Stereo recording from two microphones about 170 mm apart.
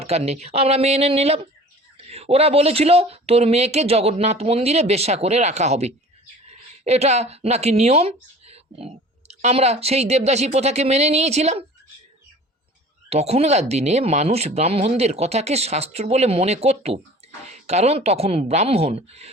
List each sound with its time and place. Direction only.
0.0 s speech: 40° right (ahead or behind)
13.1 s speech: 40° right (ahead or behind)